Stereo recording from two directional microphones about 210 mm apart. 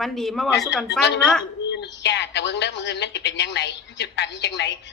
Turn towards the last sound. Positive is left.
turn(degrees=55)  # may be behind; listen again after turning